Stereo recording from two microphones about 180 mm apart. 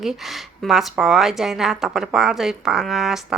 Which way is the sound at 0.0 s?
Centre (ahead or behind).